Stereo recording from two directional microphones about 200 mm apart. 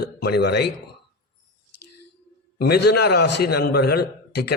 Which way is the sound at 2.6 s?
55° left (ahead or behind).